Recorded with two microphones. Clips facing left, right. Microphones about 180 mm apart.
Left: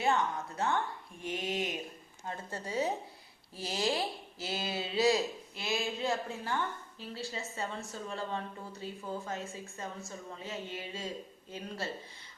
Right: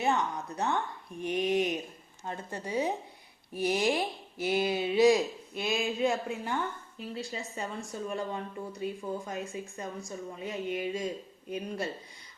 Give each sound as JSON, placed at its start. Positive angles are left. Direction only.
{"t": 0.0, "sound": "a woman's voice", "side_deg": -20}